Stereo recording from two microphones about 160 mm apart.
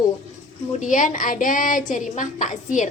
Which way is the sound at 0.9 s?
55° left (ahead or behind).